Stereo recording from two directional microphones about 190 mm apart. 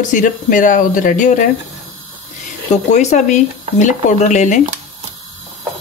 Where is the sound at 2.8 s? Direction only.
40° left (ahead or behind).